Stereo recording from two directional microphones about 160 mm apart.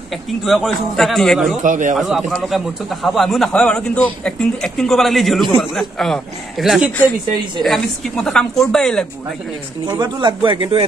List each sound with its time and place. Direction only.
0.4 s a man's voice: centre (ahead or behind)
1.6 s speech: 50° right (ahead or behind)
2.0 s a man's voice: centre (ahead or behind)
9.8 s speech: 25° right (ahead or behind)